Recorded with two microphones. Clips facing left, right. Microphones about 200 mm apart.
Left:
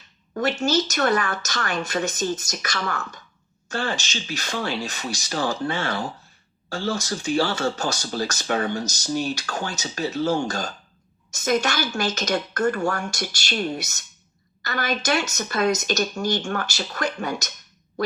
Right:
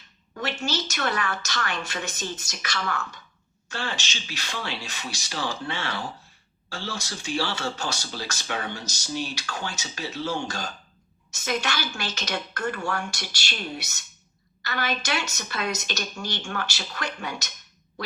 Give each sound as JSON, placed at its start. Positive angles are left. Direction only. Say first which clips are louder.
{"t": 0.3, "sound": "speech", "louder": "left 8 dB", "side_deg": 45}